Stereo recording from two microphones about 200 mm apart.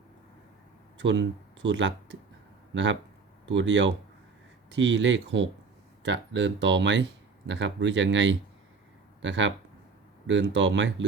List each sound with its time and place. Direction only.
0.9 s speech: 65° right (ahead or behind)